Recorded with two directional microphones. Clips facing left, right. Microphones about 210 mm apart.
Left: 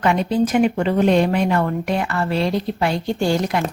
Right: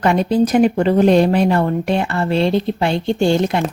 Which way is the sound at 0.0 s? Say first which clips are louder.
Right 3 dB; 40° right (ahead or behind).